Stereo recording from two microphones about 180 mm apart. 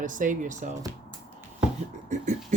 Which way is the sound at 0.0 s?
45° right (ahead or behind).